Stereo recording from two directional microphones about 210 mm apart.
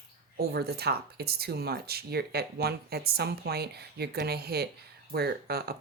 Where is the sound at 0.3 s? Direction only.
50° right (ahead or behind).